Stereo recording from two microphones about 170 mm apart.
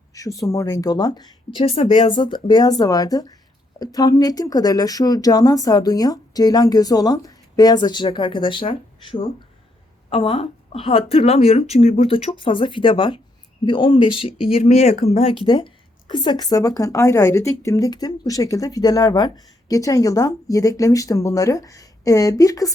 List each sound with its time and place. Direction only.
0.1 s a woman's voice: 20° left (ahead or behind)